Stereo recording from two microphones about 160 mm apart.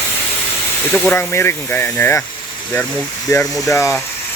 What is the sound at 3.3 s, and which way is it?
Speech, 20° left (ahead or behind).